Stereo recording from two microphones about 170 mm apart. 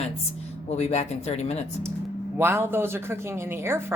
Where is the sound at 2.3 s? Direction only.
15° right (ahead or behind).